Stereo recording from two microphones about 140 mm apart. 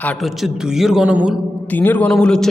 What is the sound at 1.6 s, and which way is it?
Speech, 10° left (ahead or behind).